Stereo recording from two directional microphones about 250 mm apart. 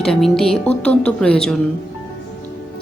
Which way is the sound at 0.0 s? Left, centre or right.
Centre.